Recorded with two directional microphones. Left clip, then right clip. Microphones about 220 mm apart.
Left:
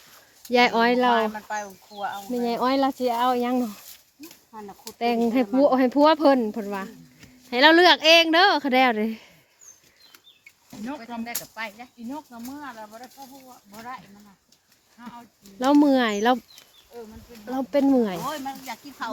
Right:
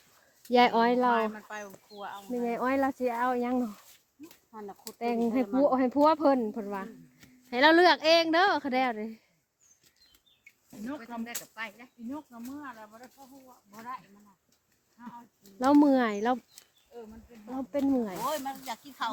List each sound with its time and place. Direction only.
0.5 s speech: 5° right (ahead or behind)
1.5 s speech: 45° left (ahead or behind)
2.5 s speech: 5° left (ahead or behind)
4.3 s speech: 35° right (ahead or behind)
4.9 s speech: 10° left (ahead or behind); by 9.3 s 35° left (ahead or behind)
10.7 s speech: 35° left (ahead or behind)
11.3 s speech: 15° left (ahead or behind)
12.5 s speech: 40° left (ahead or behind)
15.5 s speech: 5° right (ahead or behind)
16.1 s speech: 20° left (ahead or behind)
17.6 s speech: 45° left (ahead or behind)
18.3 s speech: 55° right (ahead or behind)